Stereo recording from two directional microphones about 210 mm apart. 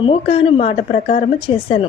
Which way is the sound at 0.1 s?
25° left (ahead or behind).